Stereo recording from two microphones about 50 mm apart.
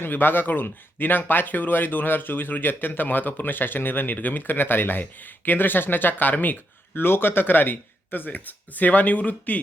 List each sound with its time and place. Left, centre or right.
0.0 s speech: left